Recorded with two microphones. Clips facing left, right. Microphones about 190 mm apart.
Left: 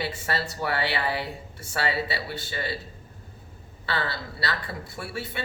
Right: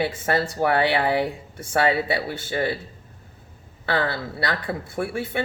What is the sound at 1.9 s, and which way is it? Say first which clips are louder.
Speech: right 6 dB; 55° right (ahead or behind).